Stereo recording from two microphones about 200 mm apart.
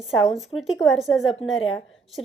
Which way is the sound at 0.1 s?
Centre (ahead or behind).